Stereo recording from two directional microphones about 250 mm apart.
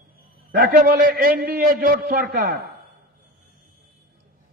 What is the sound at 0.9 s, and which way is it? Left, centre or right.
A man's voice, right.